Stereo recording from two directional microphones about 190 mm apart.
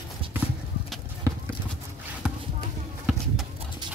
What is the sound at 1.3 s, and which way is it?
Clip-clop, 15° right (ahead or behind).